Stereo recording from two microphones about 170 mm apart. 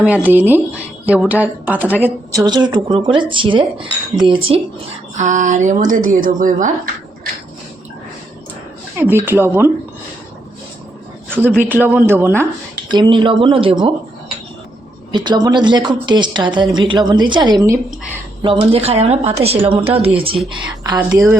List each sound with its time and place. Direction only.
0.0 s a woman's voice: 10° right (ahead or behind)
2.4 s speech: 25° right (ahead or behind)
5.1 s a woman's voice: 45° right (ahead or behind)
9.0 s speech: 10° right (ahead or behind)
11.4 s speech: 10° right (ahead or behind)
12.9 s speech: 25° right (ahead or behind)
15.1 s speech: 25° right (ahead or behind)
18.4 s speech: 35° right (ahead or behind); by 21.3 s 20° right (ahead or behind)